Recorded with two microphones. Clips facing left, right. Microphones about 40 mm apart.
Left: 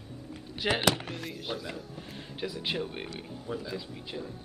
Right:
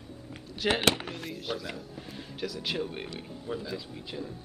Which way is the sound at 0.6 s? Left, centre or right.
Centre.